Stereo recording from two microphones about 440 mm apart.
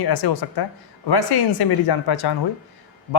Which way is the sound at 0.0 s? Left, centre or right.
Left.